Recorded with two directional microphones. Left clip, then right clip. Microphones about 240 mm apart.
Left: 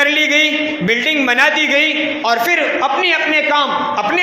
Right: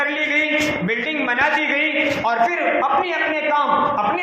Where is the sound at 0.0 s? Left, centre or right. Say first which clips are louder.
Left 7 dB; left.